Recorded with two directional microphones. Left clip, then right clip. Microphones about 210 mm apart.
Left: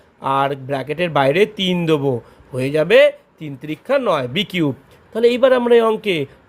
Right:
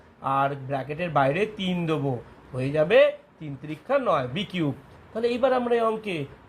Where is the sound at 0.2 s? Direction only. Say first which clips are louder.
Left 6 dB; 60° left (ahead or behind).